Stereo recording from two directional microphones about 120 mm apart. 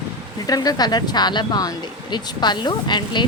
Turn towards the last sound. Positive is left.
turn(degrees=40)  # may be behind; listen again after turning